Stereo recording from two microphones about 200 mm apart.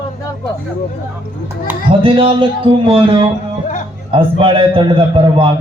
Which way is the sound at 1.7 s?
10° right (ahead or behind).